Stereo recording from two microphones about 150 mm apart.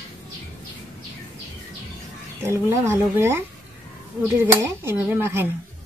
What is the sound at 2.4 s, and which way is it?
Speech, 15° right (ahead or behind).